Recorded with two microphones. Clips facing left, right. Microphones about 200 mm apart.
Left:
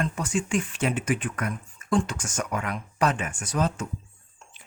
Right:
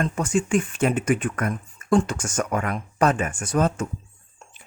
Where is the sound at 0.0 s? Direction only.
45° right (ahead or behind).